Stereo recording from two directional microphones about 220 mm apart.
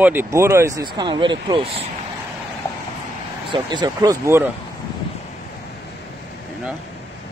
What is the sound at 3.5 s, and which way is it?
Speech, 20° right (ahead or behind).